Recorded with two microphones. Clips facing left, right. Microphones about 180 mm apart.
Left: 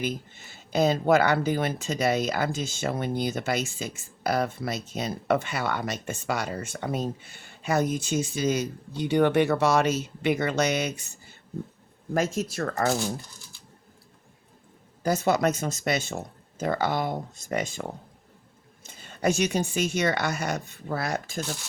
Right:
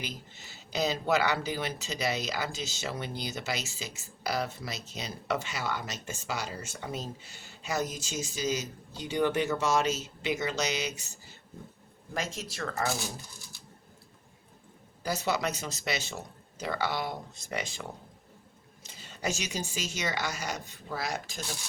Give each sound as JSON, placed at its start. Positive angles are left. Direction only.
{"t": 0.0, "sound": "speech", "side_deg": 50}
{"t": 12.1, "sound": "speech", "side_deg": 50}
{"t": 15.0, "sound": "speech", "side_deg": 50}